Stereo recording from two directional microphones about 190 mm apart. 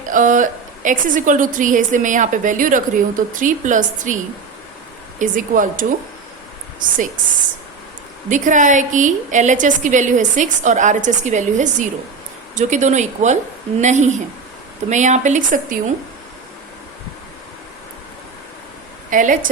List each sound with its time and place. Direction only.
0.0 s a woman's voice: 45° right (ahead or behind)
5.2 s a woman's voice: 45° right (ahead or behind)
8.3 s a woman's voice: 40° right (ahead or behind)
19.1 s a woman's voice: 45° right (ahead or behind)